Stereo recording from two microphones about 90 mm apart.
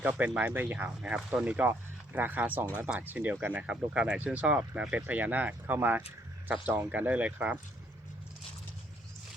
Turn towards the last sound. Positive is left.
turn(degrees=-15)  # may be behind; listen again after turning